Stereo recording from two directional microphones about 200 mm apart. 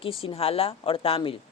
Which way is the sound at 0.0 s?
25° left (ahead or behind).